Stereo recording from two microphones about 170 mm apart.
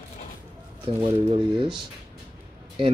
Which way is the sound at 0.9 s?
30° right (ahead or behind).